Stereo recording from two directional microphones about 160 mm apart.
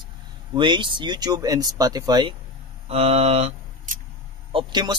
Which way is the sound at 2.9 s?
40° right (ahead or behind).